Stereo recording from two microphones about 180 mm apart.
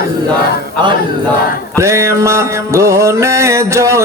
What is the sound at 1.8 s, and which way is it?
Music, 15° right (ahead or behind).